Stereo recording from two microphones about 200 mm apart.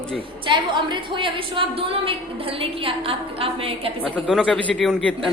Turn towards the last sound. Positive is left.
turn(degrees=5)  # may be behind; listen again after turning